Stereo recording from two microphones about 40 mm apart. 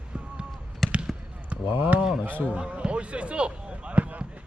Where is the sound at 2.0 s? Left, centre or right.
Centre.